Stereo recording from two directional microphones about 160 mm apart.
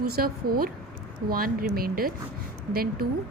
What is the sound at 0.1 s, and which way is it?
Speech, 70° right (ahead or behind).